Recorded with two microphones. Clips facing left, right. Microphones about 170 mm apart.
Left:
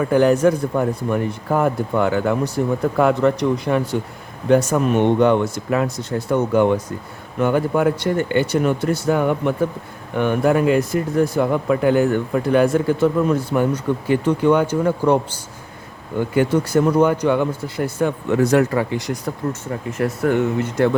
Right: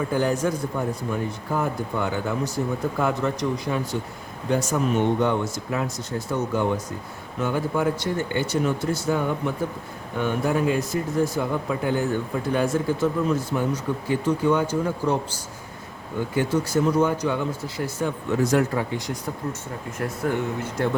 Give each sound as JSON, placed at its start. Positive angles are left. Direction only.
{"t": 0.0, "sound": "speech", "side_deg": 65}
{"t": 16.3, "sound": "speech", "side_deg": 60}